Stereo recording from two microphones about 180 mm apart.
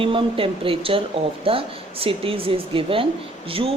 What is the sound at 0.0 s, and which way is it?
Speech, 30° right (ahead or behind).